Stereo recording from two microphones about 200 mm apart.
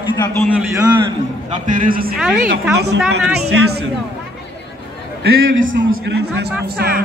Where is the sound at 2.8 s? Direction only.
55° right (ahead or behind).